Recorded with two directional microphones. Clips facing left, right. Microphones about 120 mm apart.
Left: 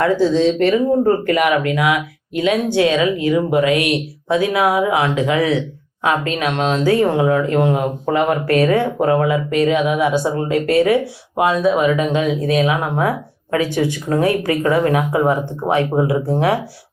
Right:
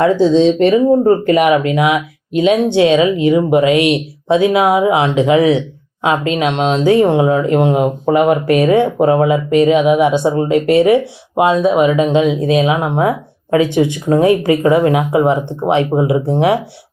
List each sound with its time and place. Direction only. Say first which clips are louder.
0.0 s speech: right 4 dB; 20° right (ahead or behind)